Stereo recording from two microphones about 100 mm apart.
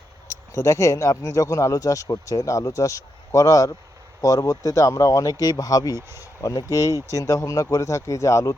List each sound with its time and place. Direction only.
0.3 s speech: 30° left (ahead or behind)